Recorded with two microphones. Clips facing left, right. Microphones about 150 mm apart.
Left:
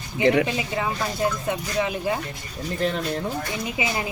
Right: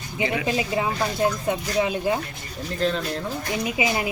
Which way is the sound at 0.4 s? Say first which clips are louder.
Right 2 dB; 20° right (ahead or behind).